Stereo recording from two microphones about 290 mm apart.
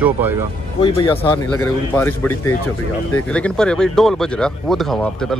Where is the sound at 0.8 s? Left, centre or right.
Centre.